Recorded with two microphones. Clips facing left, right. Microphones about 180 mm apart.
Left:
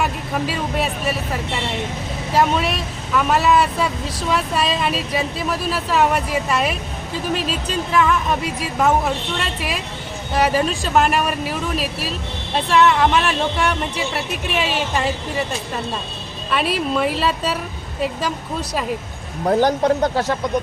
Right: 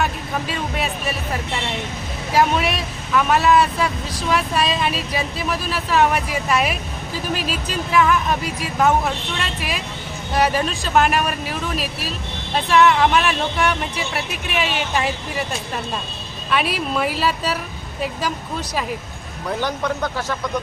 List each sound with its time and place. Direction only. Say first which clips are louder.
0.0 s speech: left 2 dB; 5° left (ahead or behind)
2.3 s speech: even; centre (ahead or behind)
9.4 s speech: left 1 dB; centre (ahead or behind)
14.5 s speech: even; centre (ahead or behind)
16.5 s speech: left 1 dB; centre (ahead or behind)
19.5 s speech: left 7 dB; 40° left (ahead or behind)